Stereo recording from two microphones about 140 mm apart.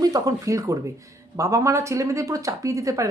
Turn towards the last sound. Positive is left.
turn(degrees=-25)  # may be behind; listen again after turning